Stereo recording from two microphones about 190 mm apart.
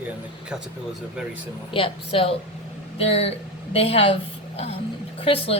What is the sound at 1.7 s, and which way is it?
A man's voice, 30° left (ahead or behind).